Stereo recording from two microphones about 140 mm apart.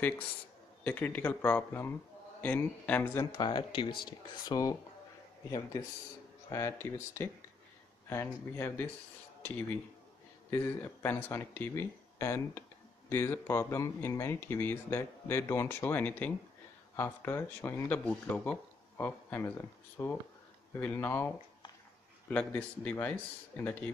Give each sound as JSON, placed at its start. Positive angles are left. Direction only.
{"t": 0.8, "sound": "speech", "side_deg": 15}
{"t": 3.3, "sound": "speech", "side_deg": 30}
{"t": 10.5, "sound": "speech", "side_deg": 15}
{"t": 22.3, "sound": "speech", "side_deg": 10}